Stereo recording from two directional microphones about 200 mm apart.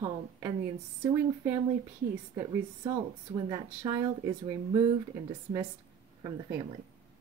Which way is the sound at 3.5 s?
20° right (ahead or behind).